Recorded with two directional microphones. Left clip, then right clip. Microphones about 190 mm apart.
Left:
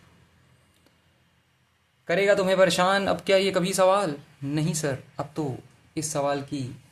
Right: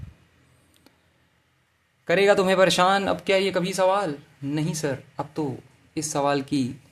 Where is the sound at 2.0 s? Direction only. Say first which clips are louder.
Right 3 dB; 20° right (ahead or behind).